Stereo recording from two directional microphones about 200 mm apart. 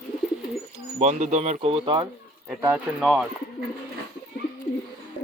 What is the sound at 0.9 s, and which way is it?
Speech, 35° right (ahead or behind).